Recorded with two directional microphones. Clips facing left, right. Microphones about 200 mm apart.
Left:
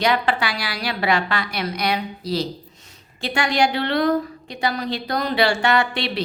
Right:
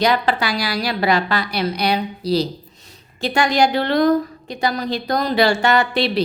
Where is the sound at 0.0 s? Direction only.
40° right (ahead or behind).